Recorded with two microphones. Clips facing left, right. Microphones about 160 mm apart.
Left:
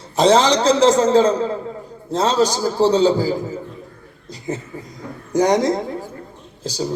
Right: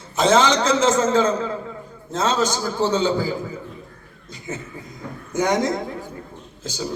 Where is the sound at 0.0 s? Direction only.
35° left (ahead or behind).